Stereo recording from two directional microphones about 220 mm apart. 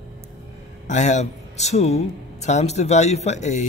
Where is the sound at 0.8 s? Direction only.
35° left (ahead or behind).